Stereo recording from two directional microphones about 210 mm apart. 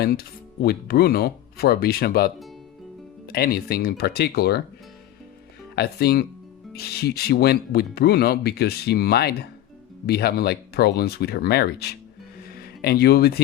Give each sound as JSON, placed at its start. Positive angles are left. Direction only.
{"t": 0.0, "sound": "speech", "side_deg": 45}
{"t": 5.7, "sound": "speech", "side_deg": 50}